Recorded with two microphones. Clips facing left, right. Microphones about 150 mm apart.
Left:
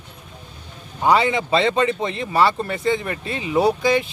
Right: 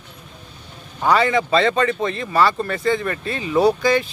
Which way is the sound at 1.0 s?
20° left (ahead or behind).